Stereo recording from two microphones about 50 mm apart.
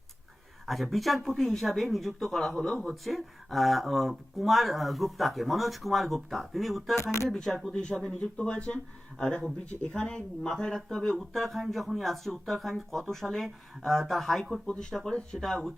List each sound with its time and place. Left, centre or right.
0.6 s speech: centre
6.9 s speech: left
7.3 s speech: centre
14.7 s speech: centre